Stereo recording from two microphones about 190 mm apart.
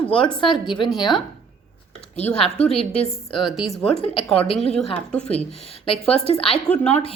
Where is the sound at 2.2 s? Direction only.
35° left (ahead or behind).